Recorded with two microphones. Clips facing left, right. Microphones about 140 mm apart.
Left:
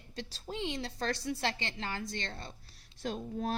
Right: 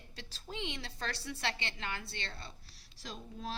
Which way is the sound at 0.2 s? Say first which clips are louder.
Left 5 dB; 40° left (ahead or behind).